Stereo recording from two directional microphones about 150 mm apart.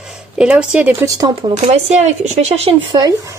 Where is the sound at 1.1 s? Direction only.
25° right (ahead or behind).